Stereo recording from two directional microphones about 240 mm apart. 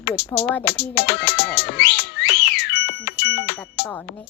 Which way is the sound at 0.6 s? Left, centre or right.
Left.